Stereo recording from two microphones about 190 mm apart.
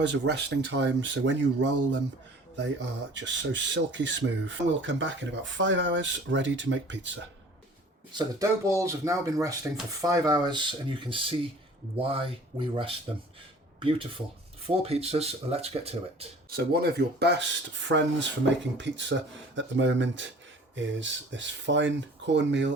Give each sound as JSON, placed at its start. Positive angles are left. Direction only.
{"t": 0.0, "sound": "speech", "side_deg": -65}
{"t": 3.2, "sound": "speech", "side_deg": -75}
{"t": 8.1, "sound": "speech", "side_deg": -15}
{"t": 14.8, "sound": "speech", "side_deg": -35}
{"t": 16.5, "sound": "speech", "side_deg": -55}
{"t": 17.8, "sound": "speech", "side_deg": -70}